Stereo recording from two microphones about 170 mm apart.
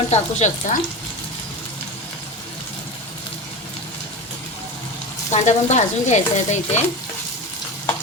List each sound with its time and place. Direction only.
0.1 s speech: 40° left (ahead or behind)
5.3 s speech: 45° left (ahead or behind)